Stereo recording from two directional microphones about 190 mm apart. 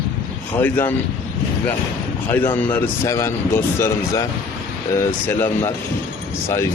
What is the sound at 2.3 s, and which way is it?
Speech, 10° left (ahead or behind).